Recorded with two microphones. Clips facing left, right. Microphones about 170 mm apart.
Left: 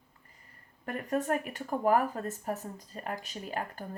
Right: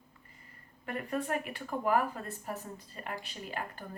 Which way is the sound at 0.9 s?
45° left (ahead or behind).